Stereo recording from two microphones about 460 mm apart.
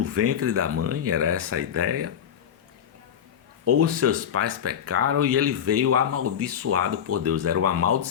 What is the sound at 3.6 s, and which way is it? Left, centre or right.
Speech, right.